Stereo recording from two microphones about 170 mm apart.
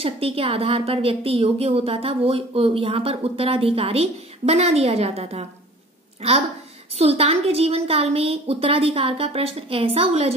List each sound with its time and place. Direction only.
0.0 s a woman's voice: 35° right (ahead or behind)
7.0 s a woman's voice: 35° right (ahead or behind)